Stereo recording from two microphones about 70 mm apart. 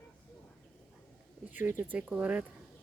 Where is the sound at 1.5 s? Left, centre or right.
Right.